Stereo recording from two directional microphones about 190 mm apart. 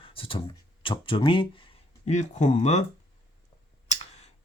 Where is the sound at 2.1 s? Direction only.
40° left (ahead or behind).